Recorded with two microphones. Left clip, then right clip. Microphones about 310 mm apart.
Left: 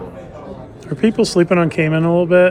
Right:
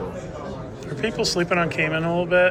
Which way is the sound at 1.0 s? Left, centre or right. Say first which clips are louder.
Left 8 dB; centre.